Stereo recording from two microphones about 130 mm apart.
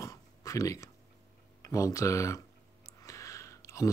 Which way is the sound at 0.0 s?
25° left (ahead or behind).